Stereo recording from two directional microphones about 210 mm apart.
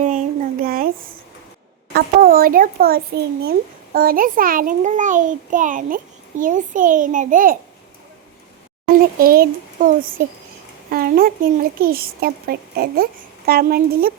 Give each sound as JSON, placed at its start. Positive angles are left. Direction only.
{"t": 0.0, "sound": "a sound", "side_deg": -40}
{"t": 1.9, "sound": "a child's voice", "side_deg": -45}
{"t": 9.0, "sound": "speech", "side_deg": -45}